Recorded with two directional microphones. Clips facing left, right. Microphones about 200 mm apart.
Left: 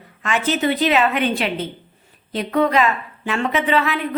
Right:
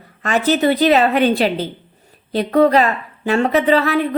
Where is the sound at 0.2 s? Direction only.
40° right (ahead or behind).